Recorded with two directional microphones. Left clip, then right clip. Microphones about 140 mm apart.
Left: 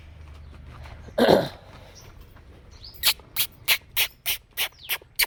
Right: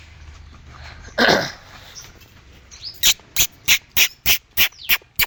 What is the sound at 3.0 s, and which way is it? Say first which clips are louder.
Insect: right 7 dB; 30° left (ahead or behind).